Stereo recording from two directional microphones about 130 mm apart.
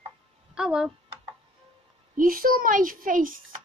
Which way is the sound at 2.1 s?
90° right.